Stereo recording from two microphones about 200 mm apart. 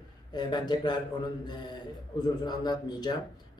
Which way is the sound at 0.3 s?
20° left (ahead or behind).